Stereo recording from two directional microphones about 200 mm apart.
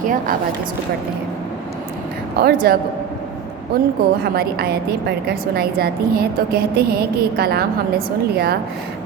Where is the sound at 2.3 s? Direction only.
50° right (ahead or behind).